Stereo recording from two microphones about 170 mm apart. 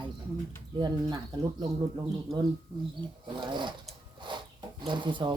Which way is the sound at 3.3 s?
25° right (ahead or behind).